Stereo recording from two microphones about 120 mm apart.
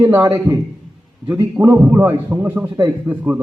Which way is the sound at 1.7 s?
20° right (ahead or behind).